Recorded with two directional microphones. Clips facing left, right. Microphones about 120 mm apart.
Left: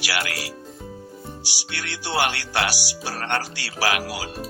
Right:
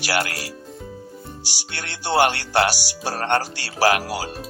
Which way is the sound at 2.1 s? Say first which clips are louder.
Right 6 dB; 40° right (ahead or behind).